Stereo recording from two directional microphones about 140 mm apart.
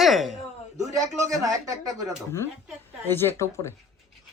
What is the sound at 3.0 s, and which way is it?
Speech, 15° left (ahead or behind).